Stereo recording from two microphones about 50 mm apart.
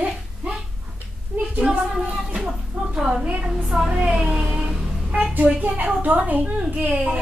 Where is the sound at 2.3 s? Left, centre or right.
Centre.